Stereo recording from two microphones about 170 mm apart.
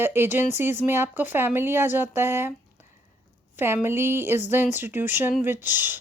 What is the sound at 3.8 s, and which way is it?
Speech, 15° right (ahead or behind).